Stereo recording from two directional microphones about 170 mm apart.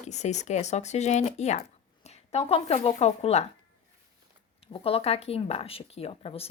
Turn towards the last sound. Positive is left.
turn(degrees=35)  # may be behind; listen again after turning